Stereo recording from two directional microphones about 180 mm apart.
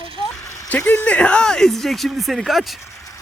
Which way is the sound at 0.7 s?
10° left (ahead or behind).